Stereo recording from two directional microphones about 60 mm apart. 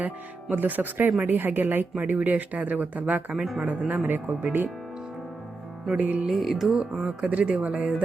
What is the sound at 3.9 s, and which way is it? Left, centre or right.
Speech, right.